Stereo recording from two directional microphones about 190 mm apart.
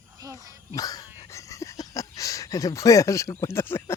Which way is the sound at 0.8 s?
20° left (ahead or behind).